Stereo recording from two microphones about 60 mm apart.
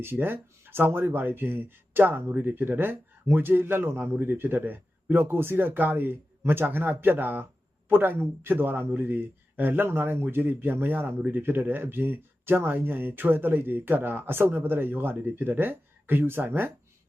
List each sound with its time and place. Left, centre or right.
0.0 s speech: right